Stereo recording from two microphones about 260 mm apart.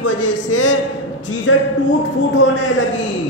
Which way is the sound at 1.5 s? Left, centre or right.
Left.